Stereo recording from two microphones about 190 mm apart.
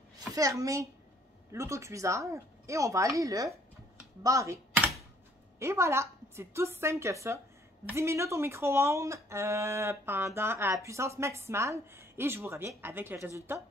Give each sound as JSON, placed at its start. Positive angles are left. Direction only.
{"t": 0.3, "sound": "speech", "side_deg": -15}
{"t": 4.2, "sound": "computer keyboard", "side_deg": -15}
{"t": 5.6, "sound": "speech", "side_deg": -15}